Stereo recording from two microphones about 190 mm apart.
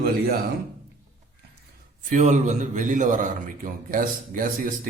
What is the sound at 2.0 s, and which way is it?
A man's voice, 40° right (ahead or behind).